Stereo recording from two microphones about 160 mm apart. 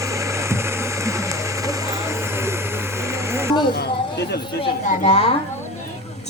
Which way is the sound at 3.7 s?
85° left.